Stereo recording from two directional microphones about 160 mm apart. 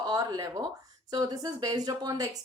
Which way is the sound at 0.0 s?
25° right (ahead or behind).